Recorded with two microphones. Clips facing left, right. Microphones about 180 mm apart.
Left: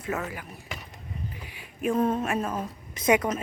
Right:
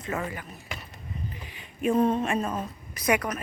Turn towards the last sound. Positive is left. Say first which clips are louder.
# left 3 dB
turn(degrees=25)  # may be behind; listen again after turning